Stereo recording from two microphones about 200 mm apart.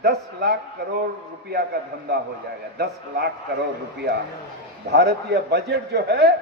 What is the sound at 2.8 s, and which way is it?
Speech, 55° right (ahead or behind).